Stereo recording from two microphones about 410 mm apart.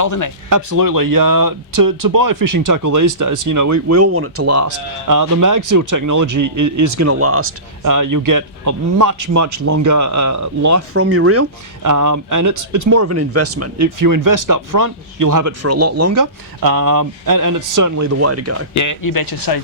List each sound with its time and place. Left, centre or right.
0.0 s speech: left
0.5 s speech: right
7.8 s speech: right
11.8 s speech: right
18.7 s speech: left